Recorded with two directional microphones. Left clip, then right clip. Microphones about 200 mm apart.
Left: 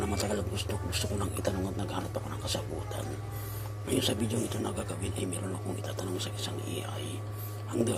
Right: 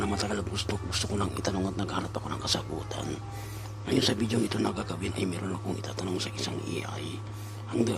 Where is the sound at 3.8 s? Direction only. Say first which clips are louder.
Right 3 dB; 20° right (ahead or behind).